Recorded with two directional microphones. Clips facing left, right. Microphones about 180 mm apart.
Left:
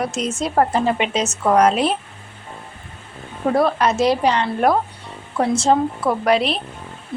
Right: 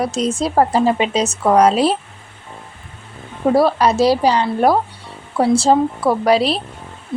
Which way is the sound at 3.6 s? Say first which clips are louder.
Right 3 dB; 35° right (ahead or behind).